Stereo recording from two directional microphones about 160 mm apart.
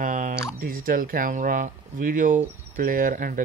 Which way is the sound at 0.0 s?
55° right (ahead or behind).